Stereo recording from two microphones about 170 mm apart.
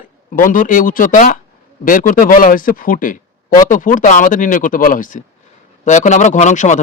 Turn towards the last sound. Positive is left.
turn(degrees=45)  # may be behind; listen again after turning